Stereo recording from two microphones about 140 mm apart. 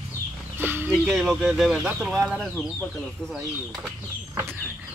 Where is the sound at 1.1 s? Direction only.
5° right (ahead or behind).